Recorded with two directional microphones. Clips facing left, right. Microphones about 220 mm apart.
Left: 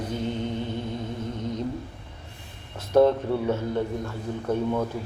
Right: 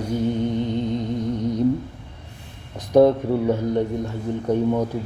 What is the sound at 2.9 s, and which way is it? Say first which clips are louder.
A man's voice: right 4 dB; 15° right (ahead or behind).